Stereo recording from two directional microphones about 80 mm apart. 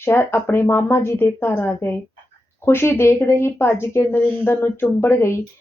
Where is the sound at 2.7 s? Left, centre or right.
Left.